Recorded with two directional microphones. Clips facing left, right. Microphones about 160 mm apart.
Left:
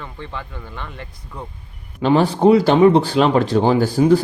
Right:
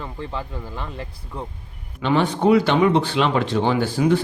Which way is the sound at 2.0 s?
35° left (ahead or behind).